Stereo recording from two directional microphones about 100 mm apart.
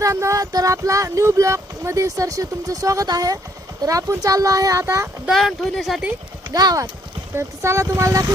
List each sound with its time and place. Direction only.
0.0 s speech: 30° right (ahead or behind)
5.3 s speech: centre (ahead or behind)
6.5 s speech: 40° right (ahead or behind)